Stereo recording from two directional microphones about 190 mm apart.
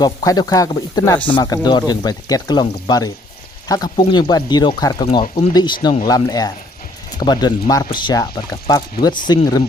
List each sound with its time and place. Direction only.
0.0 s speech: 20° left (ahead or behind)
5.2 s speech: 30° left (ahead or behind)